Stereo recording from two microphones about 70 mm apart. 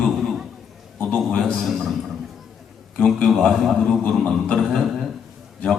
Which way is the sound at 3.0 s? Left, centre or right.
Centre.